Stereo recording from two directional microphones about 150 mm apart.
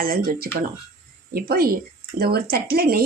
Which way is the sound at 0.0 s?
85° right.